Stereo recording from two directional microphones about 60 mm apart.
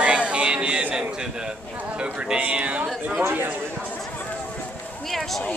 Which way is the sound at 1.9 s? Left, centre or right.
Centre.